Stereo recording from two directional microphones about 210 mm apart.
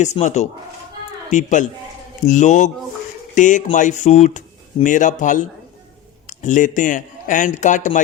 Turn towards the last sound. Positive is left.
turn(degrees=35)  # may be behind; listen again after turning